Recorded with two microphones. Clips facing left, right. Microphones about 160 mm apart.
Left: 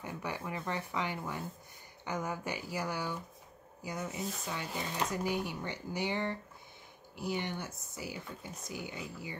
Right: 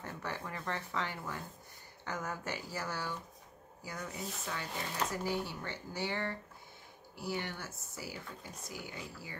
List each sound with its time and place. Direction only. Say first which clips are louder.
0.0 s speech: left 2 dB; 15° left (ahead or behind)